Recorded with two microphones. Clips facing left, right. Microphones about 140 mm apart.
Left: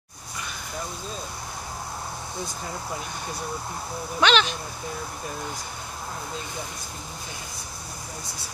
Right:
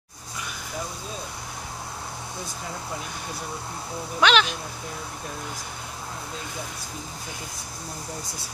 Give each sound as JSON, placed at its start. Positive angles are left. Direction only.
{"t": 4.2, "sound": "speech", "side_deg": -5}